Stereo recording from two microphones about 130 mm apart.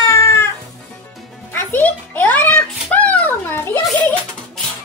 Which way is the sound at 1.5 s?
15° left (ahead or behind).